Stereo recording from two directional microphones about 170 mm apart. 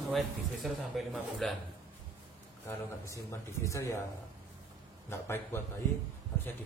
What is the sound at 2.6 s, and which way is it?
A man's voice, 15° left (ahead or behind).